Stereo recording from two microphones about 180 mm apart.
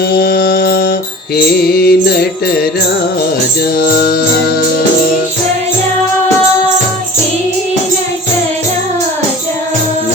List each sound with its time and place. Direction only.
0.1 s music: 60° left (ahead or behind)
3.8 s music: 60° left (ahead or behind)